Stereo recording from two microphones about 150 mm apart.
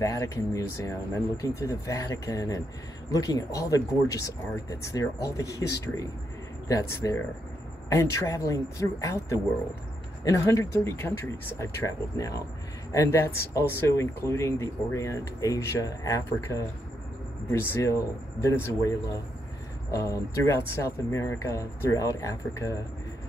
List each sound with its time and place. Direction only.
0.0 s speech: 20° left (ahead or behind)